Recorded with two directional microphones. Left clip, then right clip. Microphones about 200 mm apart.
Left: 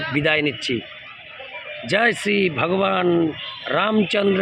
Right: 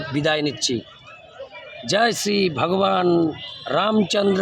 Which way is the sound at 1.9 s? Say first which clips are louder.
Left 1 dB; centre (ahead or behind).